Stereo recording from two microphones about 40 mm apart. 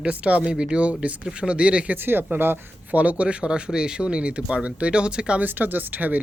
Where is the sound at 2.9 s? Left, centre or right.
Right.